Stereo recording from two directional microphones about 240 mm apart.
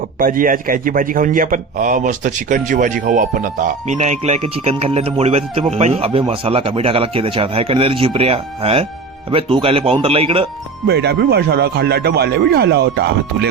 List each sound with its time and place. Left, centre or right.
0.2 s a man's voice: right
10.8 s speech: right